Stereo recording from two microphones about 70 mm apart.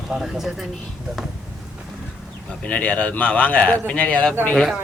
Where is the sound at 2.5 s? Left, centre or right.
Centre.